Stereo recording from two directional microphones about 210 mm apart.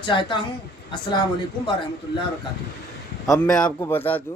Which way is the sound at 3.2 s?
Centre (ahead or behind).